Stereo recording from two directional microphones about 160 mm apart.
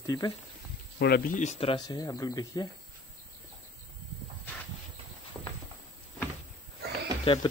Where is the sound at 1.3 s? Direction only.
50° left (ahead or behind).